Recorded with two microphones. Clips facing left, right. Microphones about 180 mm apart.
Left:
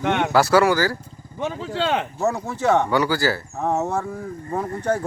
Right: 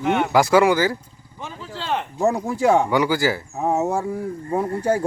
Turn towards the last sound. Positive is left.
turn(degrees=-30)  # may be behind; listen again after turning